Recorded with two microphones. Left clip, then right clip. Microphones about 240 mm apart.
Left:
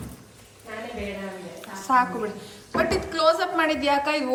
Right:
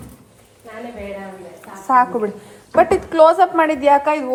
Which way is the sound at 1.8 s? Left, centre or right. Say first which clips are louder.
Right 7 dB; centre.